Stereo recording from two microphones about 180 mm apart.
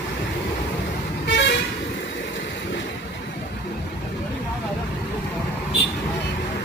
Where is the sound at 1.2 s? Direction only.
80° left.